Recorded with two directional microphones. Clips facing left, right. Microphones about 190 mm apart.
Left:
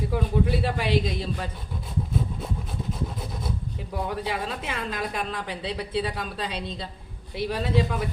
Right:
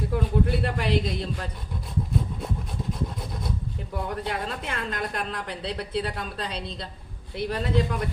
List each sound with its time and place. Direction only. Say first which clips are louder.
0.1 s speech: even; 5° left (ahead or behind)
4.1 s speech: even; 5° left (ahead or behind)